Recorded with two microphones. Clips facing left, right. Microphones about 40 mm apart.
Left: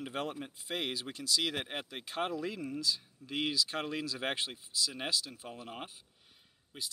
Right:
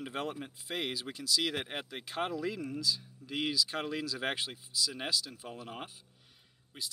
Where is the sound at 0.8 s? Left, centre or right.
Left.